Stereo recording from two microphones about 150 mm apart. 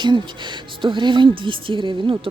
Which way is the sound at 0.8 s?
30° right (ahead or behind).